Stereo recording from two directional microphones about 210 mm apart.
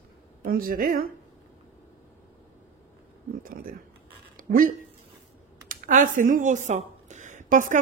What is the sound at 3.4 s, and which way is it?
Speech, 40° right (ahead or behind).